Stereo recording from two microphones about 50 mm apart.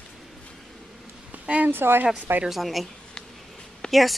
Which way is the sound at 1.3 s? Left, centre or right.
Right.